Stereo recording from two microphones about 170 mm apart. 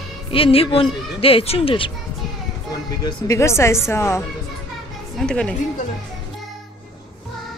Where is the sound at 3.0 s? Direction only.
20° left (ahead or behind).